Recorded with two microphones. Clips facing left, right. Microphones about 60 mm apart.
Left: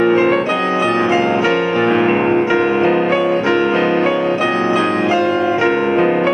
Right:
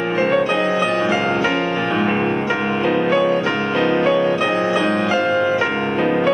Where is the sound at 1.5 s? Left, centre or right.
Left.